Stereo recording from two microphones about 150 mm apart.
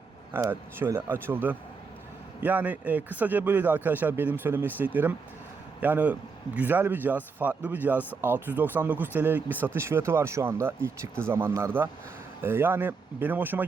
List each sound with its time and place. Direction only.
0.3 s speech: 15° right (ahead or behind)